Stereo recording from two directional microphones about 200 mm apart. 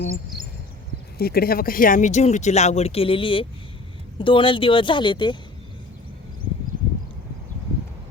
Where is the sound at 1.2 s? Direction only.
50° left (ahead or behind); by 5.4 s 25° left (ahead or behind).